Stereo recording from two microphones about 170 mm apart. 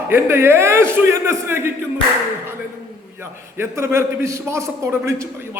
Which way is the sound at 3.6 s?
15° right (ahead or behind).